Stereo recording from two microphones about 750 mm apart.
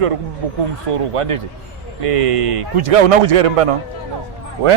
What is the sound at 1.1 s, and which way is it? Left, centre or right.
A man's voice, right.